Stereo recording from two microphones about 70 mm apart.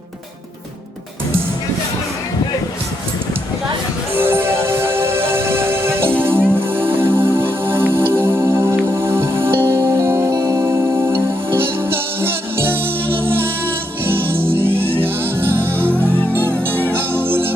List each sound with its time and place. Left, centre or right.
4.1 s music: right
10.3 s music: right
10.6 s music: right